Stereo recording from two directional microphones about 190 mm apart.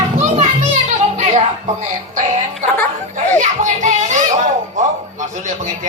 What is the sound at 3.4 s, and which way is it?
Child singing, 40° right (ahead or behind).